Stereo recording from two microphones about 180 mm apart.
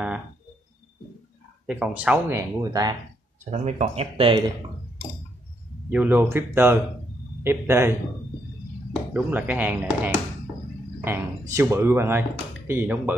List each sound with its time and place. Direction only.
1.7 s speech: 5° right (ahead or behind); by 3.0 s 20° right (ahead or behind)
3.4 s speech: 35° right (ahead or behind)
5.9 s speech: 10° right (ahead or behind)
9.1 s speech: 10° right (ahead or behind)